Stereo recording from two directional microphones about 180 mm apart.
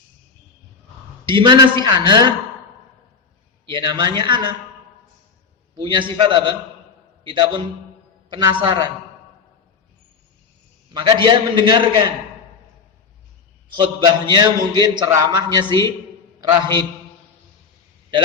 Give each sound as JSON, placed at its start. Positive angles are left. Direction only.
{"t": 1.2, "sound": "a man's voice", "side_deg": -25}
{"t": 3.7, "sound": "a man's voice", "side_deg": -25}
{"t": 5.7, "sound": "a man's voice", "side_deg": -25}
{"t": 10.9, "sound": "a man's voice", "side_deg": -25}
{"t": 13.7, "sound": "a man's voice", "side_deg": -25}